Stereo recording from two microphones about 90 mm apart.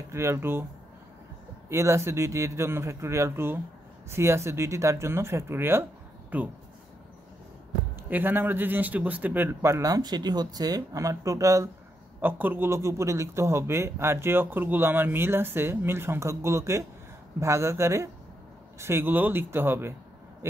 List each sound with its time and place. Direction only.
0.1 s a man's voice: 30° right (ahead or behind)
1.7 s a man's voice: 30° right (ahead or behind)
8.1 s a man's voice: 20° right (ahead or behind)
12.2 s a man's voice: 20° right (ahead or behind)